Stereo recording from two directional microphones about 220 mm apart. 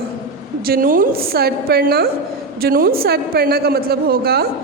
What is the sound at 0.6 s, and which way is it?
A woman's voice, 40° right (ahead or behind).